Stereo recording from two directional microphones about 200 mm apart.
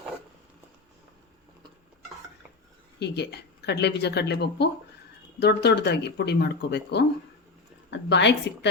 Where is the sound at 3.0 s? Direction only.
55° left (ahead or behind).